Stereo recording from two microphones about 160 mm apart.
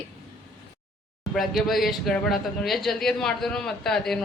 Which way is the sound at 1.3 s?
Centre (ahead or behind).